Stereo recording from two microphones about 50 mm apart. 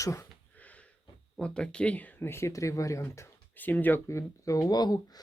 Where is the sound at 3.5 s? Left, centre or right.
Left.